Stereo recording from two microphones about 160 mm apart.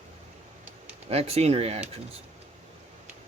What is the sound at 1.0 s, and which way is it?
Speech, 40° right (ahead or behind).